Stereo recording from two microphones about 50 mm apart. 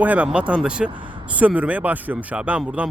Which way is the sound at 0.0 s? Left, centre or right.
Right.